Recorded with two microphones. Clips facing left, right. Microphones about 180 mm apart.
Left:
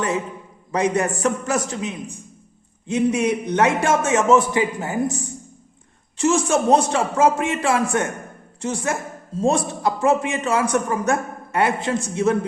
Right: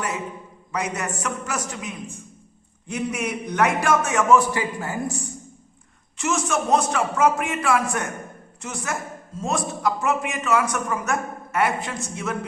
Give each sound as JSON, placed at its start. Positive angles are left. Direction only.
{"t": 0.7, "sound": "a man's voice", "side_deg": 30}
{"t": 6.1, "sound": "a man's voice", "side_deg": 30}